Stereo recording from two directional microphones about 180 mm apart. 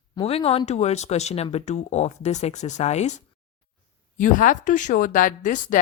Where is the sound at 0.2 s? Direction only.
35° left (ahead or behind).